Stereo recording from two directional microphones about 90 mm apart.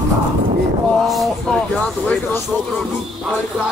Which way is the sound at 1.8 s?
15° left (ahead or behind).